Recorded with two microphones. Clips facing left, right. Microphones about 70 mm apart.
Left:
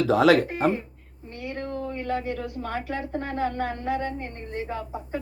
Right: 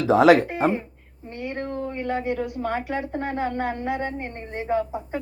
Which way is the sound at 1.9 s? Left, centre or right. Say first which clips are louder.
Right 3 dB; right.